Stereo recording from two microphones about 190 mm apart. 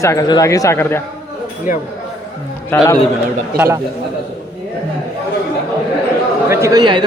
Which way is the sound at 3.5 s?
15° right (ahead or behind).